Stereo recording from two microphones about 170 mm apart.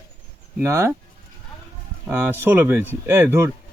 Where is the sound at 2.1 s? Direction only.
10° right (ahead or behind).